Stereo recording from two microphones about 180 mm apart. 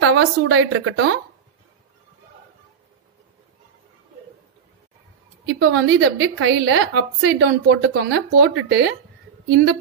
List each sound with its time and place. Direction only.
0.0 s a woman's voice: 90° right
5.6 s a woman's voice: 90° right; by 8.9 s 70° right (ahead or behind)